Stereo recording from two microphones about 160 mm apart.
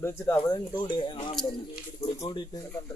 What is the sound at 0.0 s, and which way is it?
Speech, 15° left (ahead or behind).